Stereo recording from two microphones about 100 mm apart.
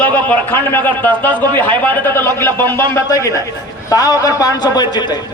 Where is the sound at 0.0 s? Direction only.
15° left (ahead or behind).